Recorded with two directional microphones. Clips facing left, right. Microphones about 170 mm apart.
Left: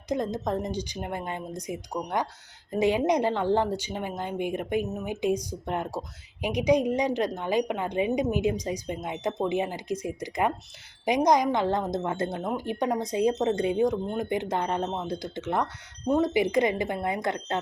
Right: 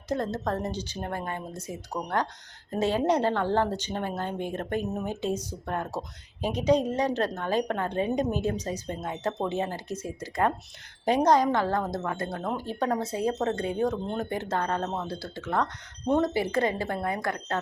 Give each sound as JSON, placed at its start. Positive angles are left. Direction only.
{"t": 0.1, "sound": "a woman's voice", "side_deg": 15}
{"t": 15.6, "sound": "a woman's voice", "side_deg": 10}